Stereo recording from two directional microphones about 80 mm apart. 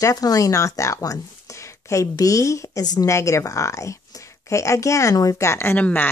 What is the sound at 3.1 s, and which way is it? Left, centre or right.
Speech, left.